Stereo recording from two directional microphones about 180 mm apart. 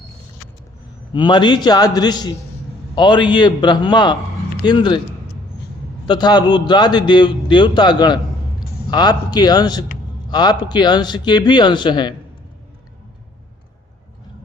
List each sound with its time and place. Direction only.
1.1 s a man's voice: 25° left (ahead or behind)
6.1 s a man's voice: 25° left (ahead or behind)